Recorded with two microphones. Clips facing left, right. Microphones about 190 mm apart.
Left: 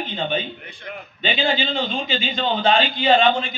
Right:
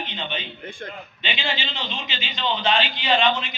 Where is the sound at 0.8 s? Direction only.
50° right (ahead or behind).